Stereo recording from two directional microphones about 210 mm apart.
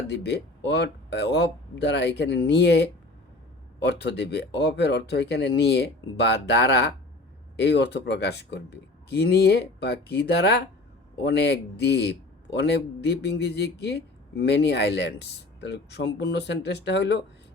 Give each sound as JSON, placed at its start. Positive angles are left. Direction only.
{"t": 0.1, "sound": "speech", "side_deg": 50}